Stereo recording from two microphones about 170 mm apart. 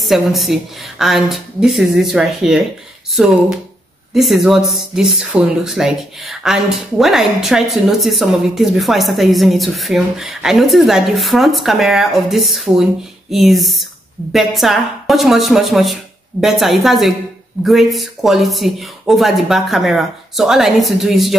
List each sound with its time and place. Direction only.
0.0 s speech: centre (ahead or behind)